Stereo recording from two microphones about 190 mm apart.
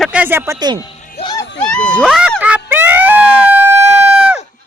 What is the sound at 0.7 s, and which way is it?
Music, 20° left (ahead or behind).